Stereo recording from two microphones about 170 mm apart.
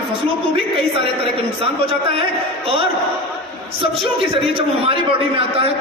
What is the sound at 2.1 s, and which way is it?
Speech, 35° right (ahead or behind).